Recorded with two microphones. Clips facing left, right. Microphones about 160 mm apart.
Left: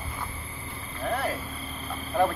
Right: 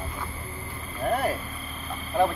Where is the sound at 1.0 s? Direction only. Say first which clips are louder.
Right 4 dB; 45° right (ahead or behind).